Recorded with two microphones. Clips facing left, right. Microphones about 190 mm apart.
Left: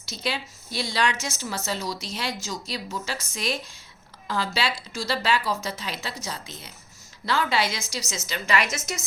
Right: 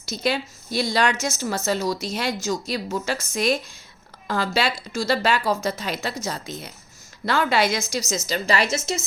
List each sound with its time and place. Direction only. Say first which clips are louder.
0.0 s a woman's voice: right 6 dB; 45° right (ahead or behind)
8.3 s a woman's voice: right 3 dB; 35° right (ahead or behind)